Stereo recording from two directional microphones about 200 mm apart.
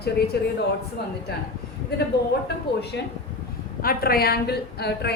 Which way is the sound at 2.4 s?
55° left (ahead or behind).